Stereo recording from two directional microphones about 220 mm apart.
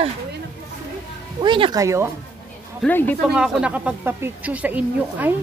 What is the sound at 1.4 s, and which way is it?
Speech, 20° right (ahead or behind).